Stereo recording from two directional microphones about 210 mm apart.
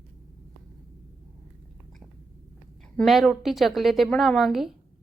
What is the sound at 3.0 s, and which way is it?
A woman's voice, centre (ahead or behind).